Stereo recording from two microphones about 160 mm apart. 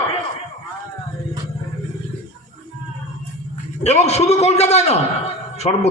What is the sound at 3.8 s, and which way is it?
A man's voice, 45° left (ahead or behind).